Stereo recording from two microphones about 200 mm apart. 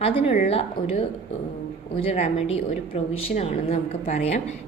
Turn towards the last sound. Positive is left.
turn(degrees=35)  # may be behind; listen again after turning